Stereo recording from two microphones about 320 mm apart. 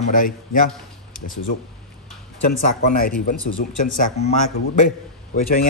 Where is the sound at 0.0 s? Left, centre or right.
Left.